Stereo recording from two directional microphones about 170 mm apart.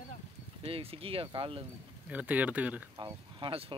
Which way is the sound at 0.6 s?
35° right (ahead or behind).